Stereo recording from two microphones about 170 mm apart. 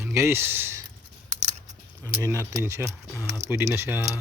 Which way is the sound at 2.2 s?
20° right (ahead or behind).